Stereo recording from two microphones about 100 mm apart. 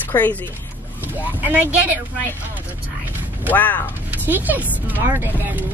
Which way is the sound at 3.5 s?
20° left (ahead or behind).